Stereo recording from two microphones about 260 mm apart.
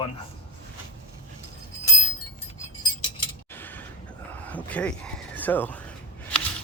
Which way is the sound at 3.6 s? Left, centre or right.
Centre.